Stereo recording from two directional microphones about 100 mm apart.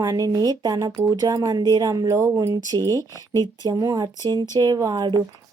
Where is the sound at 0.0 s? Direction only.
35° right (ahead or behind).